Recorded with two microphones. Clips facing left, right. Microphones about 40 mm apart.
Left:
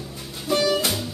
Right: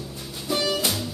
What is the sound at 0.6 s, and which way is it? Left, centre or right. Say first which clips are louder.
Music: left 3 dB; centre.